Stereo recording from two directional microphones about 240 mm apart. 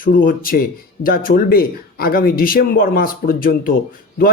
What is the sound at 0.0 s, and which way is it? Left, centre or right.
Speech, left.